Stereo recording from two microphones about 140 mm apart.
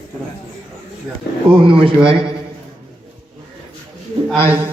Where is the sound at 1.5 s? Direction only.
40° right (ahead or behind).